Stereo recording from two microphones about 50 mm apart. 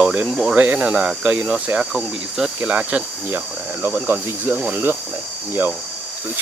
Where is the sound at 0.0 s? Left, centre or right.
Right.